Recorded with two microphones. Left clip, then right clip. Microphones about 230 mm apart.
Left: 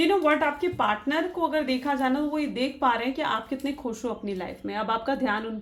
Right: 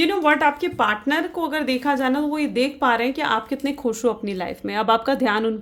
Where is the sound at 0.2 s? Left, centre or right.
Right.